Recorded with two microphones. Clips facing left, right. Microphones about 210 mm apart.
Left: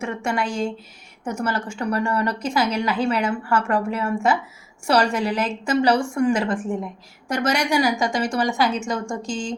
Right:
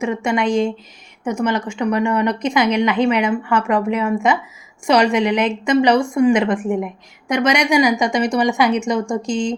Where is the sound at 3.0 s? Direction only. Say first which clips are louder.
Right 5 dB; 15° right (ahead or behind).